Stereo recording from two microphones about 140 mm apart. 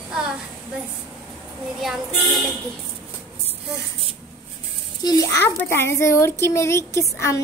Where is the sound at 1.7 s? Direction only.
Centre (ahead or behind).